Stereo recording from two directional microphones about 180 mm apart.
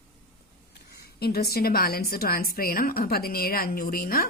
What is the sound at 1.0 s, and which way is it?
A woman's voice, 60° left (ahead or behind).